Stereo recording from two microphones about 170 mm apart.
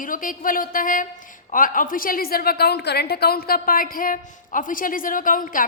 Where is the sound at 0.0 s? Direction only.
55° left (ahead or behind).